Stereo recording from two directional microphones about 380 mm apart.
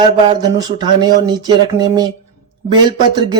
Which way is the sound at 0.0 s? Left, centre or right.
Centre.